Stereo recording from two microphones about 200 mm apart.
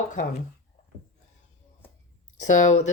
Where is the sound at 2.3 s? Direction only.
35° left (ahead or behind).